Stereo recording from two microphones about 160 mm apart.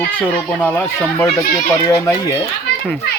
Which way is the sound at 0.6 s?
10° left (ahead or behind).